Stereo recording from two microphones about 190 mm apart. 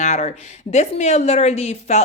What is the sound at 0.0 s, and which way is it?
A woman's voice, 40° left (ahead or behind).